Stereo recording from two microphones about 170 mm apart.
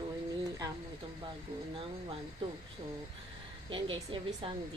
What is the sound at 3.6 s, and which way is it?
Speech, 30° right (ahead or behind).